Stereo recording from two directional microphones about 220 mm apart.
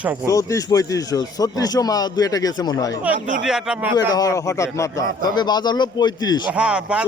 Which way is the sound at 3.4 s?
Centre (ahead or behind).